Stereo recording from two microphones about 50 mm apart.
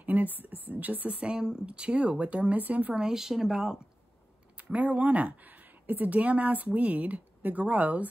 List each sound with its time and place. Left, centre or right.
0.0 s a woman's voice: right
2.9 s speech: centre
4.7 s speech: right